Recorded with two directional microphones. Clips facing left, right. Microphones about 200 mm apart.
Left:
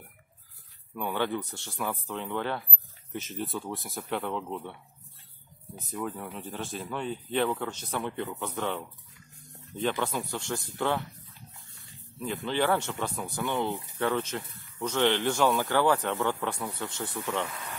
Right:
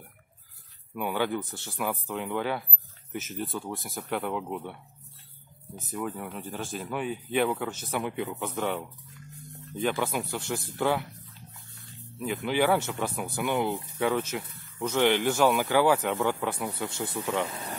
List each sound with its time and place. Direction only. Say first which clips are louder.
0.9 s speech: right 1 dB; 10° right (ahead or behind)
5.8 s speech: right 1 dB; centre (ahead or behind)
12.4 s speech: right 2 dB; 10° right (ahead or behind)
17.5 s speech: right 3 dB; 30° right (ahead or behind)